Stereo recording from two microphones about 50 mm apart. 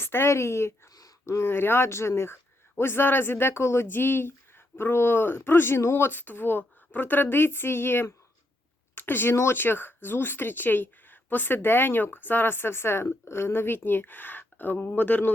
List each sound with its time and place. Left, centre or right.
0.0 s a woman's voice: left
1.5 s a woman's voice: left
6.1 s speech: left
9.0 s a sound: left
9.5 s speech: left